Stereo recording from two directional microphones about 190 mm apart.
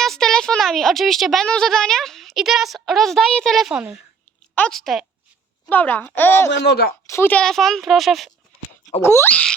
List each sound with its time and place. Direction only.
0.0 s a child's voice: centre (ahead or behind)
6.5 s speech: 65° left (ahead or behind)
7.1 s speech: 10° left (ahead or behind)
9.0 s speech: 15° left (ahead or behind)